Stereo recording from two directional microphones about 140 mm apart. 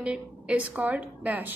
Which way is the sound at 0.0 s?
10° right (ahead or behind).